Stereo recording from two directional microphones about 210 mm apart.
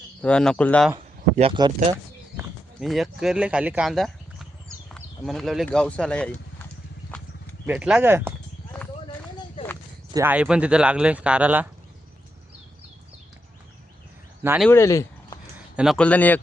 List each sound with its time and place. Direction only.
0.2 s speech: 5° left (ahead or behind)
0.9 s speech: 25° right (ahead or behind)
2.8 s speech: centre (ahead or behind)
7.7 s speech: 5° right (ahead or behind)
9.6 s a sound: 25° left (ahead or behind)
10.2 s speech: 5° right (ahead or behind)
14.4 s speech: 10° right (ahead or behind)
14.7 s speech: 15° left (ahead or behind)
15.5 s speech: 5° right (ahead or behind)